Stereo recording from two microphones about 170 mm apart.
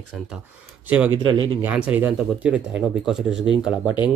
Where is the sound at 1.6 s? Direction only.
10° right (ahead or behind).